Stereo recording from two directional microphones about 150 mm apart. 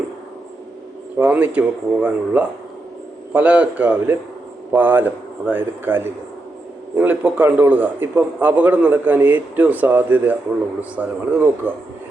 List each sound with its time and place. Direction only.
1.2 s a man's voice: 10° right (ahead or behind)